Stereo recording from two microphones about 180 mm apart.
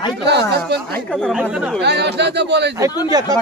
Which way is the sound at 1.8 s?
70° right (ahead or behind).